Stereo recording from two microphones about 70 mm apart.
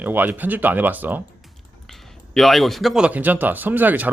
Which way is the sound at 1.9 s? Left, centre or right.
Centre.